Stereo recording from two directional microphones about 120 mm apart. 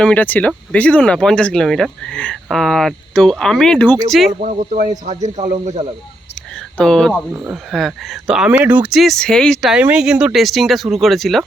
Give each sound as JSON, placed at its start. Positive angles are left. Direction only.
{"t": 0.0, "sound": "speech", "side_deg": 10}
{"t": 4.4, "sound": "speech", "side_deg": -90}
{"t": 5.0, "sound": "speech", "side_deg": -75}
{"t": 6.7, "sound": "speech", "side_deg": 5}
{"t": 7.3, "sound": "speech", "side_deg": -10}
{"t": 7.7, "sound": "speech", "side_deg": 0}
{"t": 8.4, "sound": "speech", "side_deg": -15}
{"t": 8.9, "sound": "speech", "side_deg": 0}